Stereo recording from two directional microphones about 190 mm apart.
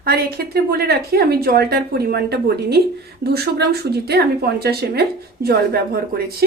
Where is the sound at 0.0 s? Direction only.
55° right (ahead or behind).